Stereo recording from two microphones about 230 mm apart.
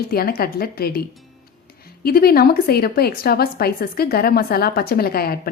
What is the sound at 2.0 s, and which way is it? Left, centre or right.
A woman's voice, left.